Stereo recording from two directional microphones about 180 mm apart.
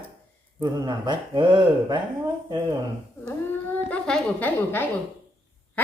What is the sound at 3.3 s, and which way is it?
A woman's voice, 5° left (ahead or behind).